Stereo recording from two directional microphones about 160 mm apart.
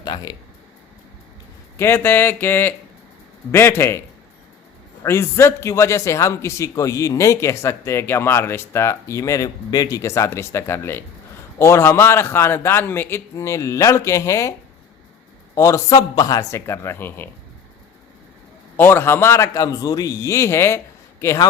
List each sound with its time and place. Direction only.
0.0 s speech: 25° left (ahead or behind)
1.7 s speech: 15° left (ahead or behind)
5.0 s speech: 15° left (ahead or behind)
15.5 s speech: 20° left (ahead or behind)
18.8 s speech: 15° left (ahead or behind)